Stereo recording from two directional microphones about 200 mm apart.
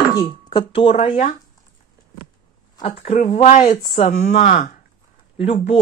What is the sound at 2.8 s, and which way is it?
Speech, 35° left (ahead or behind).